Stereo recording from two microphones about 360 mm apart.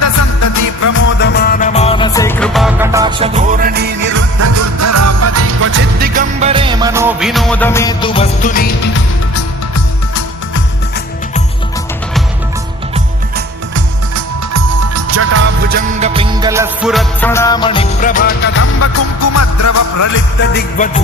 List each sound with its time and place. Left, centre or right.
0.0 s music: left
1.2 s music: left; by 4.1 s right
4.4 s music: right; by 8.9 s left
14.5 s music: right
16.0 s music: centre; by 20.1 s left
20.4 s music: left